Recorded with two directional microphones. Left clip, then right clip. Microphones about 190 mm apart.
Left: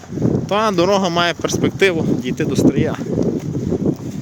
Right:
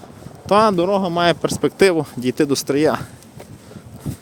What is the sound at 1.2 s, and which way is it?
Speech, 15° right (ahead or behind).